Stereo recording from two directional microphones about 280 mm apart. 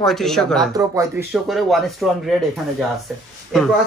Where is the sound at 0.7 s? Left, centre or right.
Centre.